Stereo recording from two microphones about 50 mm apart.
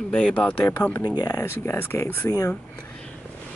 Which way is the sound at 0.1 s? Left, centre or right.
Centre.